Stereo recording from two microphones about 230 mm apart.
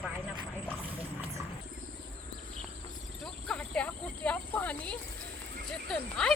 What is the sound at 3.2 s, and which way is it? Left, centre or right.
Speech, centre.